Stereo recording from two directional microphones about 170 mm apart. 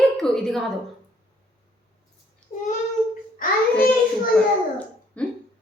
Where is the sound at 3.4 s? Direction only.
55° left (ahead or behind).